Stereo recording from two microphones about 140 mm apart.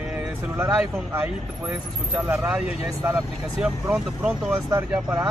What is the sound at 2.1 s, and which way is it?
A man's voice, 15° right (ahead or behind).